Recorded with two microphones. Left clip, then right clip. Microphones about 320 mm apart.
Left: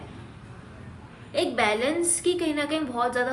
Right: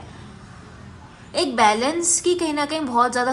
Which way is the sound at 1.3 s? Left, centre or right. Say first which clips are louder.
Right 6 dB; centre.